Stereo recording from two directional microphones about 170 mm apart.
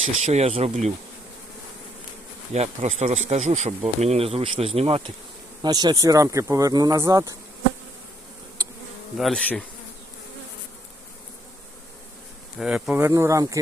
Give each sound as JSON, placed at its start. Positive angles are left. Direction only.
{"t": 0.2, "sound": "speech", "side_deg": -40}
{"t": 2.5, "sound": "speech", "side_deg": -40}
{"t": 5.6, "sound": "speech", "side_deg": -25}
{"t": 9.1, "sound": "bee", "side_deg": 0}
{"t": 12.5, "sound": "speech", "side_deg": -5}